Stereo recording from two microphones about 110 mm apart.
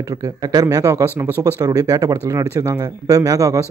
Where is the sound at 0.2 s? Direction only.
35° right (ahead or behind).